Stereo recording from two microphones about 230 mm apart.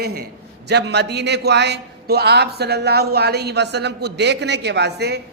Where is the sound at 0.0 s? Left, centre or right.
Right.